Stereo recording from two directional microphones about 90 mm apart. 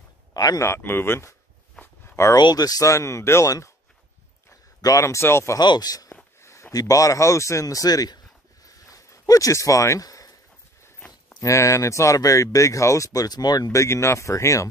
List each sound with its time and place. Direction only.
0.3 s speech: 45° left (ahead or behind)
0.7 s speech: 25° left (ahead or behind)
2.3 s speech: 50° left (ahead or behind)
4.8 s speech: 35° left (ahead or behind)
5.6 s speech: 50° left (ahead or behind)
6.4 s a sound: 30° left (ahead or behind)
6.7 s speech: 40° left (ahead or behind)
8.6 s a sound: 40° left (ahead or behind)
11.4 s speech: 35° left (ahead or behind)